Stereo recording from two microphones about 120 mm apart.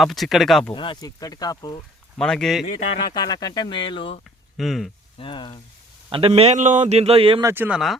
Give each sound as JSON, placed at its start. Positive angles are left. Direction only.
{"t": 0.0, "sound": "speech", "side_deg": 0}
{"t": 0.7, "sound": "speech", "side_deg": 45}
{"t": 2.1, "sound": "speech", "side_deg": 5}
{"t": 3.1, "sound": "speech", "side_deg": 35}
{"t": 4.5, "sound": "speech", "side_deg": 0}
{"t": 5.1, "sound": "speech", "side_deg": 45}
{"t": 6.1, "sound": "a man's voice", "side_deg": -50}
{"t": 6.6, "sound": "a sound", "side_deg": -80}
{"t": 7.4, "sound": "speech", "side_deg": -15}